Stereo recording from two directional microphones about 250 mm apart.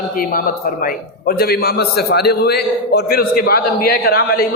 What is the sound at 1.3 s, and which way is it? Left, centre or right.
A man's voice, left.